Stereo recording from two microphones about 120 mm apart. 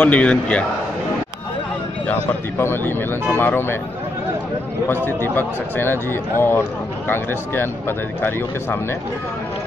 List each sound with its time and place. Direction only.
0.0 s a man's voice: 10° left (ahead or behind)
2.0 s a man's voice: 20° left (ahead or behind)
4.8 s a man's voice: 15° left (ahead or behind)